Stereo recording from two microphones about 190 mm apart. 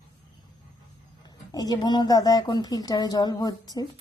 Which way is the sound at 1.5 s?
20° left (ahead or behind).